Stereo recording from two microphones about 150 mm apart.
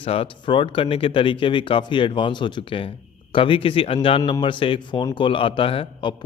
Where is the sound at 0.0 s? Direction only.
40° left (ahead or behind).